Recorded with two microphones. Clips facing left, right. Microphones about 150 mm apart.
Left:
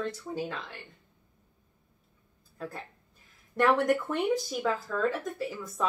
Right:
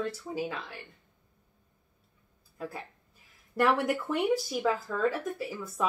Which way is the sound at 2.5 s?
5° right (ahead or behind).